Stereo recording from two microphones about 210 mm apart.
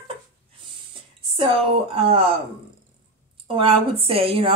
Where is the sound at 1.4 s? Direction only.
25° right (ahead or behind).